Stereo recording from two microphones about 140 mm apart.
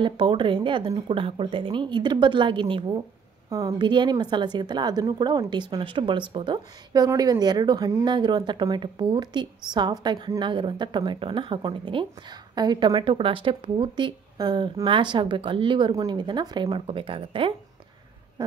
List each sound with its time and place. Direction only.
0.0 s a woman's voice: 35° right (ahead or behind)
3.4 s a woman's voice: 25° right (ahead or behind)